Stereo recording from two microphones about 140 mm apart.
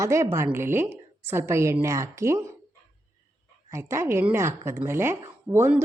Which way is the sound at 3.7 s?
20° right (ahead or behind).